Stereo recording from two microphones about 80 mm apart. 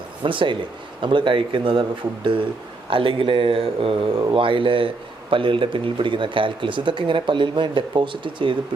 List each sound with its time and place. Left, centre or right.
0.2 s speech: right